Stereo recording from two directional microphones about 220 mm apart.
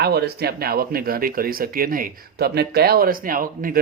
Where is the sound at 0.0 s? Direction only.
45° right (ahead or behind).